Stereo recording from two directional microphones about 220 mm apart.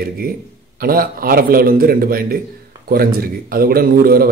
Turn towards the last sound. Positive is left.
turn(degrees=-40)  # may be behind; listen again after turning